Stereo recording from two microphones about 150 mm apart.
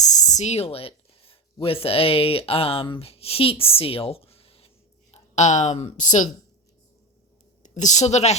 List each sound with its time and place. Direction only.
0.0 s speech: 50° left (ahead or behind)
5.1 s speech: 50° left (ahead or behind)
7.6 s a woman's voice: 55° left (ahead or behind)